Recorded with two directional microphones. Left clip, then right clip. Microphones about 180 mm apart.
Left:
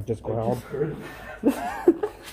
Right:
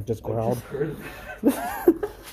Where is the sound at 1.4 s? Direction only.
30° right (ahead or behind).